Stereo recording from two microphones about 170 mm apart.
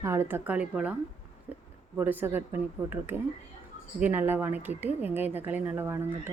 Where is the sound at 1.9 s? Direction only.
10° right (ahead or behind).